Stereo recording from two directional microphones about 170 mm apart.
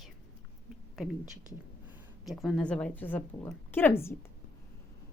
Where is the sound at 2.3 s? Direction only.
Centre (ahead or behind).